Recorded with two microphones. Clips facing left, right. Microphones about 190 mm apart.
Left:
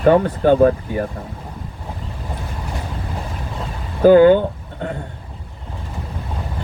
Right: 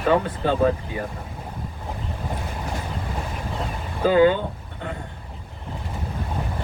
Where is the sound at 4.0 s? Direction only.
50° left (ahead or behind).